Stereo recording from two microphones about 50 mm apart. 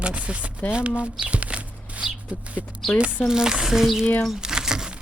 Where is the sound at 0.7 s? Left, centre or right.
Right.